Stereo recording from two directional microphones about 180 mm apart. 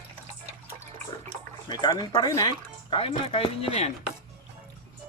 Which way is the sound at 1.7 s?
20° left (ahead or behind).